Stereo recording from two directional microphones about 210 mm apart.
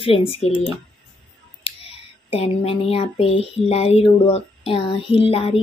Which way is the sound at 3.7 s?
30° left (ahead or behind).